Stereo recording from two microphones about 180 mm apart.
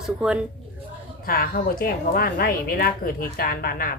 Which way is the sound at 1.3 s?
55° left (ahead or behind).